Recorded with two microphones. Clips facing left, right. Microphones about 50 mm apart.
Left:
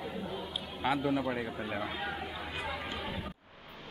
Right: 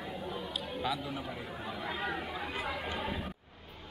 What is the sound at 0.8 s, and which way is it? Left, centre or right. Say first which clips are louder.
Speech: left 7 dB; left.